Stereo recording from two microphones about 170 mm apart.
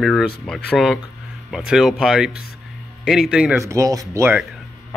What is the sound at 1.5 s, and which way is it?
Speech, 5° right (ahead or behind).